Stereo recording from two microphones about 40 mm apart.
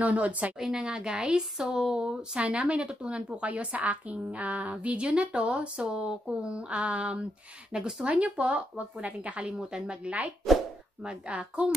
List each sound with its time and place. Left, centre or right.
0.0 s a woman's voice: right
0.6 s speech: centre
3.4 s a woman's voice: right
5.0 s speech: right
7.7 s a woman's voice: right
9.5 s a woman's voice: centre
9.8 s speech: right